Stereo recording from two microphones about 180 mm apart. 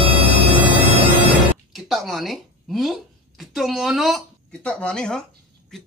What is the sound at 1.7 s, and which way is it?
Speech, centre (ahead or behind).